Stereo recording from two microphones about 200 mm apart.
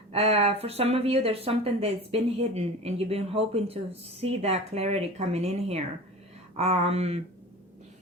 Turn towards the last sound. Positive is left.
turn(degrees=-30)  # may be behind; listen again after turning